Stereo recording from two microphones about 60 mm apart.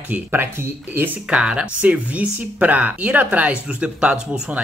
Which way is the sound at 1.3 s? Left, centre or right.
Centre.